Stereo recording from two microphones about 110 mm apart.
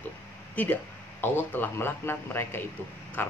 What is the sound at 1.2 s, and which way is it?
Speech, 20° left (ahead or behind).